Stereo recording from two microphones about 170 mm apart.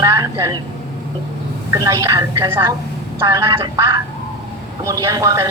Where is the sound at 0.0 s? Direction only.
20° right (ahead or behind).